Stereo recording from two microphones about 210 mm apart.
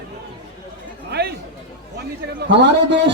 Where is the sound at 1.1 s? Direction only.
50° right (ahead or behind).